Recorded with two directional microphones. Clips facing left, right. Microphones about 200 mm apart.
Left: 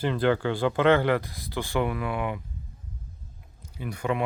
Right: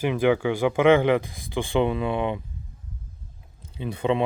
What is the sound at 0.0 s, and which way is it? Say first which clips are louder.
Speech: right 3 dB; 10° right (ahead or behind).